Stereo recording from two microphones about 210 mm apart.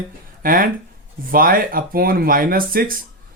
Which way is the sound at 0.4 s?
40° right (ahead or behind).